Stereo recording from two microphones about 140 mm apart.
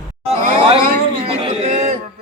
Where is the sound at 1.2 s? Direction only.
45° right (ahead or behind).